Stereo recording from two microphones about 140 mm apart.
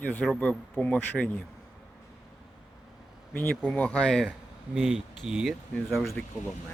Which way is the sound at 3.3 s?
15° left (ahead or behind).